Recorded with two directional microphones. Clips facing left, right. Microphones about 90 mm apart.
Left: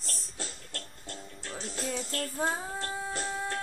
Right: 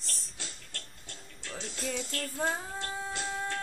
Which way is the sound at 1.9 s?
40° left (ahead or behind).